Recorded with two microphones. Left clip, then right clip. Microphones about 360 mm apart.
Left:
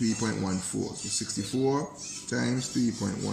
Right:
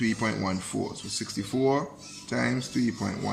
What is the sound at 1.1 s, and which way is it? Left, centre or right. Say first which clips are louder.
Speech: even; right.